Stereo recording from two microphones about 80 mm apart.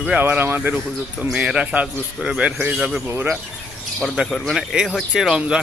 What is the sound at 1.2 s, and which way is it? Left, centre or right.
Speech, centre.